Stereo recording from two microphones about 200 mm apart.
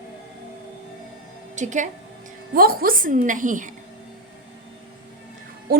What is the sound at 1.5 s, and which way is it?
A woman's voice, 40° right (ahead or behind).